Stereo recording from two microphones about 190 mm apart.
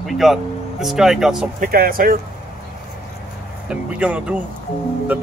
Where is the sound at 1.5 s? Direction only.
50° right (ahead or behind).